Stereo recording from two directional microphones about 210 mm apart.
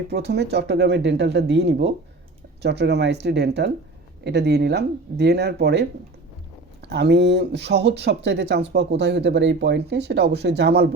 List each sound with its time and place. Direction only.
0.1 s speech: 55° right (ahead or behind)